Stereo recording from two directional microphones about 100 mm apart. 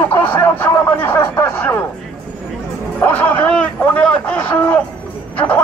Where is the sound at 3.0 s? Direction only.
20° left (ahead or behind).